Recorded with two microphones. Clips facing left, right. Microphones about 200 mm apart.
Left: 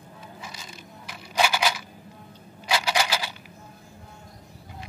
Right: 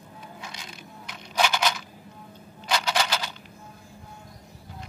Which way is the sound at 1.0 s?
5° left (ahead or behind).